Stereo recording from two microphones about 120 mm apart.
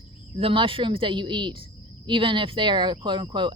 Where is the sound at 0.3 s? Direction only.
50° right (ahead or behind).